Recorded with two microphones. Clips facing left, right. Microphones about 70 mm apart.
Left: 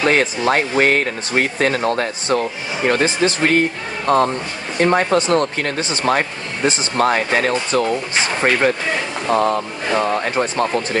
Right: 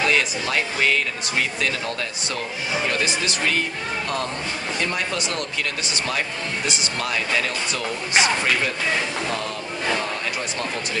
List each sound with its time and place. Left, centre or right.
0.0 s speech: left